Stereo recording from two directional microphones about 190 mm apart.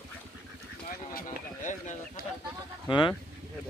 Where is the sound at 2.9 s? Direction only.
25° left (ahead or behind).